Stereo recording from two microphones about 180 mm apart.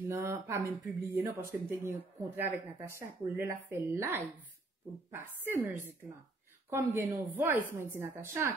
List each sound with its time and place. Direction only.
0.1 s speech: 15° right (ahead or behind)